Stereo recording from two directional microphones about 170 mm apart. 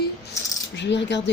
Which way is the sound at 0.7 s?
90° left.